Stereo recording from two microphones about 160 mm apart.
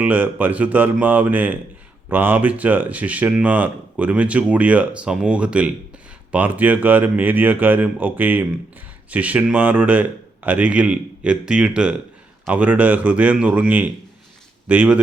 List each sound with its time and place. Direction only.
0.0 s speech: 10° right (ahead or behind)